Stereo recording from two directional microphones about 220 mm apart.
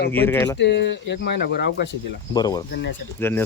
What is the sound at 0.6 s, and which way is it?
Speech, 50° left (ahead or behind).